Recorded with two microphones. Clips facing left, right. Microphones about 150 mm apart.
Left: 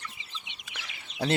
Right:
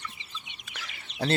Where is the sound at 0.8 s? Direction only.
15° left (ahead or behind).